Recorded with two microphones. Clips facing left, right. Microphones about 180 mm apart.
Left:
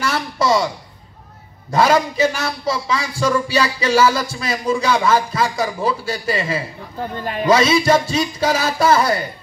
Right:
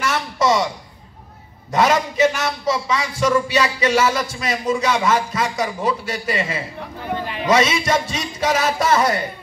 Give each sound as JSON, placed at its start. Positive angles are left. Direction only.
{"t": 0.0, "sound": "a sound", "side_deg": 30}
{"t": 1.7, "sound": "a man's voice", "side_deg": 30}
{"t": 7.0, "sound": "a man's voice", "side_deg": 45}
{"t": 7.4, "sound": "a man's voice", "side_deg": 30}